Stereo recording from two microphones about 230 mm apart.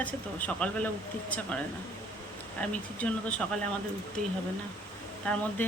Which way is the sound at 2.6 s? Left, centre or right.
Centre.